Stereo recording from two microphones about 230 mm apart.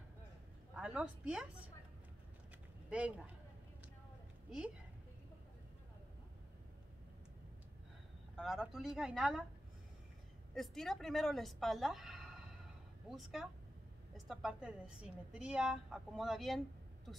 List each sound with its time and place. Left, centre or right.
0.7 s a woman's voice: centre
2.9 s a woman's voice: centre
4.5 s speech: centre
8.4 s a woman's voice: centre
10.5 s a woman's voice: centre